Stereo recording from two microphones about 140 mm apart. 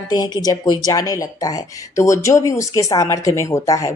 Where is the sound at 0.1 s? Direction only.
25° left (ahead or behind).